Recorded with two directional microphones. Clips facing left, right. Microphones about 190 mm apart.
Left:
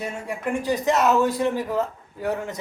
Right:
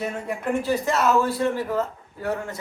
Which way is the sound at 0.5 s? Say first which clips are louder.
Left 2 dB; 15° left (ahead or behind).